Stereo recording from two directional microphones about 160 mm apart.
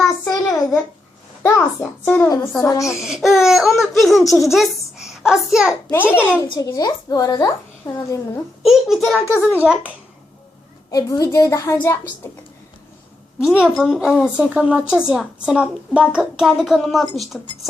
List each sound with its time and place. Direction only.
0.0 s a sound: 5° left (ahead or behind)
1.4 s a woman's voice: 15° left (ahead or behind)
2.6 s a woman's voice: 20° left (ahead or behind)
3.0 s a woman's voice: centre (ahead or behind)
5.9 s a child's voice: 15° left (ahead or behind)
8.6 s a woman's voice: centre (ahead or behind)
10.9 s a woman's voice: 20° left (ahead or behind)
13.4 s a woman's voice: 5° right (ahead or behind)